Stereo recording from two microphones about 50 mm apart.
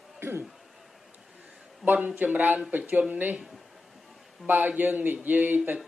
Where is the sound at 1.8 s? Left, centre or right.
Right.